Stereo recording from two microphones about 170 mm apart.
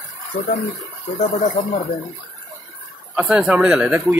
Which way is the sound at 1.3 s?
45° left (ahead or behind).